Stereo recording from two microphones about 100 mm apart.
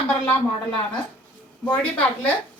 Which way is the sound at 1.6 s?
15° left (ahead or behind).